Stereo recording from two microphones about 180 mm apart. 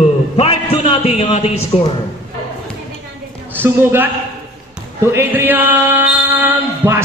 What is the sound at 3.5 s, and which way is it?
Speech, 10° right (ahead or behind).